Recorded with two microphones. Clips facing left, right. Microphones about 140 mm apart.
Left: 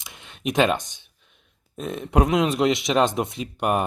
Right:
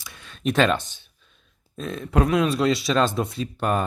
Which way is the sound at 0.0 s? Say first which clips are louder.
Right 2 dB; 20° left (ahead or behind).